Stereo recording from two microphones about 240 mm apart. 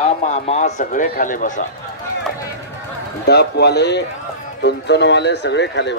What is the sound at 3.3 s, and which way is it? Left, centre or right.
Speech, left.